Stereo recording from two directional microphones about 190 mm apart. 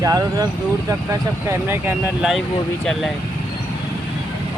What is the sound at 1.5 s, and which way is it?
Speech, 10° right (ahead or behind).